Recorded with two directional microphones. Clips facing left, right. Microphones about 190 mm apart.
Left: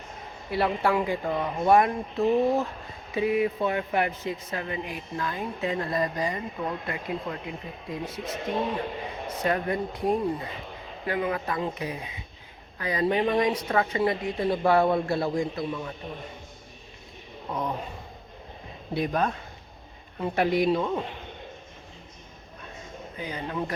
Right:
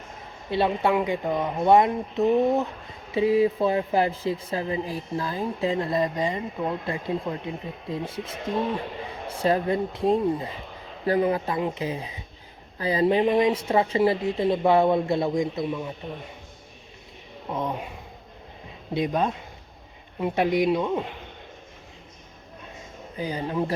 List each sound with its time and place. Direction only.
0.5 s speech: 25° right (ahead or behind)
9.4 s speech: 25° right (ahead or behind)
18.9 s speech: 20° right (ahead or behind)
23.1 s speech: 30° right (ahead or behind)